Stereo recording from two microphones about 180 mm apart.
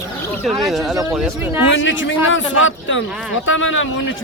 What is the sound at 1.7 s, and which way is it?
A man's voice, 90° left.